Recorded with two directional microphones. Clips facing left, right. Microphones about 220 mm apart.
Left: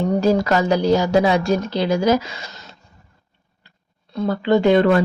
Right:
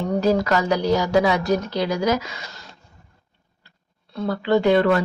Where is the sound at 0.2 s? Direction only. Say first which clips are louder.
Even; 25° left (ahead or behind).